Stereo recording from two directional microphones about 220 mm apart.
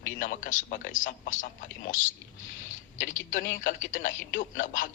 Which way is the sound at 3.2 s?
35° left (ahead or behind).